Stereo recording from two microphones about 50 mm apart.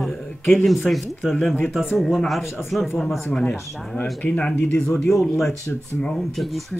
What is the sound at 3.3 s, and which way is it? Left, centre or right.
Speech, left.